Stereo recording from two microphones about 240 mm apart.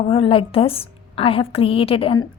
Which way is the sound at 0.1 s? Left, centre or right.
Left.